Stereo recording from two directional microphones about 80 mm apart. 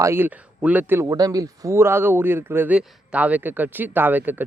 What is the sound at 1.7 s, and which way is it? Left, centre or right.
Speech, right.